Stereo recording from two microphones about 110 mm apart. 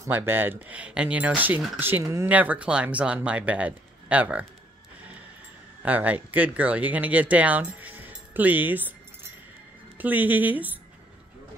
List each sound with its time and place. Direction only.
0.0 s speech: 20° right (ahead or behind)
5.8 s speech: 15° right (ahead or behind)
9.9 s speech: 15° right (ahead or behind)